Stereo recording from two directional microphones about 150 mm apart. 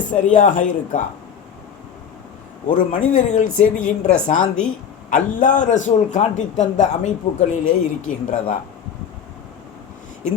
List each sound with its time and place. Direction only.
0.1 s a man's voice: 60° left (ahead or behind)
2.6 s a man's voice: 60° left (ahead or behind)